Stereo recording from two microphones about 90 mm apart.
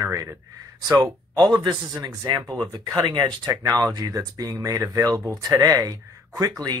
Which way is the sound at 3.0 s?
55° right (ahead or behind).